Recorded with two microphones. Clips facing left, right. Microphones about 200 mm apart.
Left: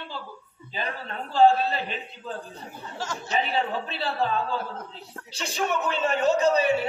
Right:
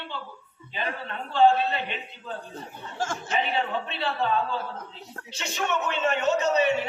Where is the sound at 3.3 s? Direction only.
35° left (ahead or behind).